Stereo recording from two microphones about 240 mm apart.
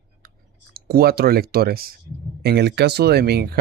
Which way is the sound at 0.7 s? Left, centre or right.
Right.